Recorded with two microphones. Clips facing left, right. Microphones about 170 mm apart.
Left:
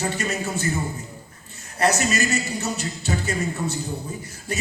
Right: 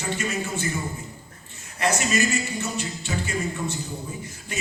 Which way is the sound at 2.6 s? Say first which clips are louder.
Left 2 dB; 40° left (ahead or behind).